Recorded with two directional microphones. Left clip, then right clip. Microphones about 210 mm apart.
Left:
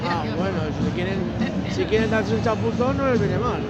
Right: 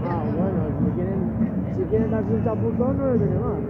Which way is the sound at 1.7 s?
10° left (ahead or behind).